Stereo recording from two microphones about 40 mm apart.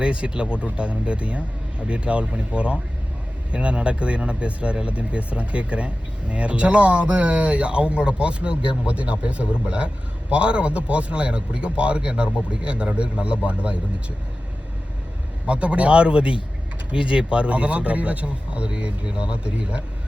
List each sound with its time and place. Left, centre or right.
0.0 s speech: right
15.4 s speech: right